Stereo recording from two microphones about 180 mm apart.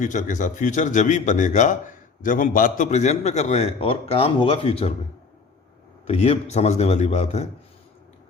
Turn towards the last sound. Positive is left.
turn(degrees=40)  # may be behind; listen again after turning